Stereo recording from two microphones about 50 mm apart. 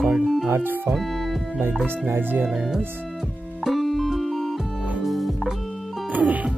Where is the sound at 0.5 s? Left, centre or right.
Right.